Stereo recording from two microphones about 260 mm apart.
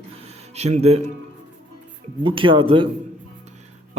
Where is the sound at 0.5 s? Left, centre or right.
Right.